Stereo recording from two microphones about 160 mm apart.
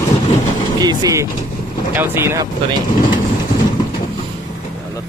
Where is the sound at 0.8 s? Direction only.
25° right (ahead or behind).